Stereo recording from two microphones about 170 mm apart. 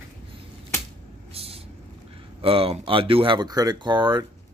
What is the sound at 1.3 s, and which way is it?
Vehicle, 35° right (ahead or behind).